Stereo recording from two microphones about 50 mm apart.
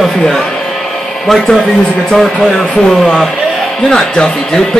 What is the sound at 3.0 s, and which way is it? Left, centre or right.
Speech, centre.